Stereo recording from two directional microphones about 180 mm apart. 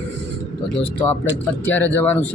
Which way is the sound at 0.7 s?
10° left (ahead or behind).